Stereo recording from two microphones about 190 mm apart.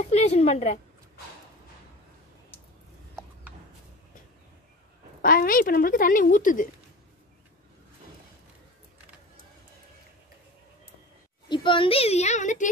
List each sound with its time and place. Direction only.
0.1 s a sound: 35° left (ahead or behind)
5.2 s a woman's voice: 50° left (ahead or behind)
11.4 s a child's voice: 25° left (ahead or behind); by 12.6 s 40° left (ahead or behind)